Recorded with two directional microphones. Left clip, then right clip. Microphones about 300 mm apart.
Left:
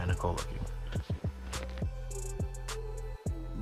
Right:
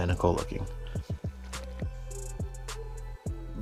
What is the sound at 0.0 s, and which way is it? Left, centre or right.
Music, right.